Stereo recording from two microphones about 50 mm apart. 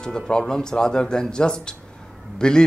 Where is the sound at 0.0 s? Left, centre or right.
Centre.